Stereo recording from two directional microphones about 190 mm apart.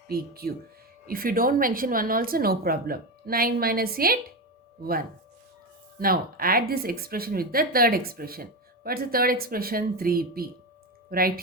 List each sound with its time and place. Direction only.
0.1 s speech: 55° right (ahead or behind)